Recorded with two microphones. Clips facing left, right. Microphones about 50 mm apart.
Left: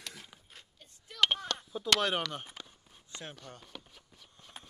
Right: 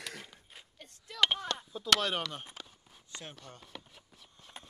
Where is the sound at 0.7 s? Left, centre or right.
Right.